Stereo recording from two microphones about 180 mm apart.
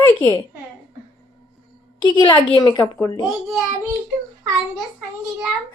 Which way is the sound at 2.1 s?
25° left (ahead or behind).